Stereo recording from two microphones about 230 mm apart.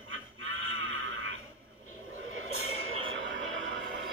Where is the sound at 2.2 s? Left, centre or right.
Right.